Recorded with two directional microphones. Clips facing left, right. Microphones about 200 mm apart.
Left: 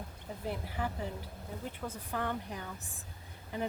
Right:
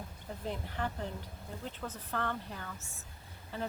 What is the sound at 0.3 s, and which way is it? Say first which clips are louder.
A woman's voice: left 1 dB; 5° left (ahead or behind).